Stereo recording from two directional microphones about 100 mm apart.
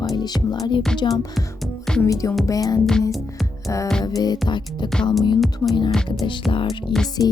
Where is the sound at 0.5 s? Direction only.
40° left (ahead or behind).